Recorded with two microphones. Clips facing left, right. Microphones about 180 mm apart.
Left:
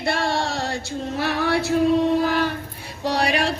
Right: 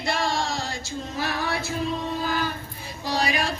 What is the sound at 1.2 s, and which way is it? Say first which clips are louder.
Female singing: left 6 dB; 70° left (ahead or behind).